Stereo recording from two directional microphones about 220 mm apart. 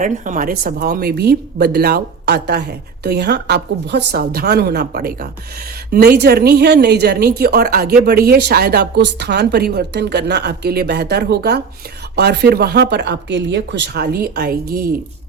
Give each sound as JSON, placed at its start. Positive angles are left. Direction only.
{"t": 0.0, "sound": "a woman's voice", "side_deg": -35}